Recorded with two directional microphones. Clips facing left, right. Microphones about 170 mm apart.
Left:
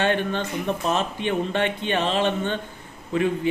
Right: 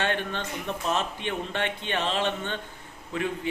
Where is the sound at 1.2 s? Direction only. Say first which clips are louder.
Left 7 dB; 15° left (ahead or behind).